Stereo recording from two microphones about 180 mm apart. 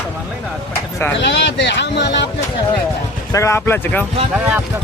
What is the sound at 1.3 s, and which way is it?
Speech, 75° left (ahead or behind).